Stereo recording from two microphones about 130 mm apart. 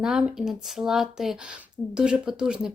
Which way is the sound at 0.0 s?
5° right (ahead or behind).